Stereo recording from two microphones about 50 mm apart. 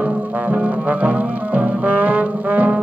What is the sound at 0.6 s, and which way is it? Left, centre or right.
Brass instrument, right.